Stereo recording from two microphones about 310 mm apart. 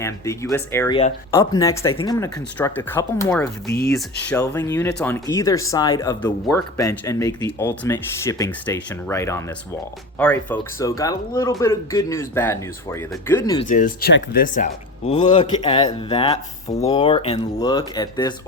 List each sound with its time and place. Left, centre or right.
0.0 s speech: centre
3.7 s speech: left
4.3 s speech: centre
13.6 s speech: left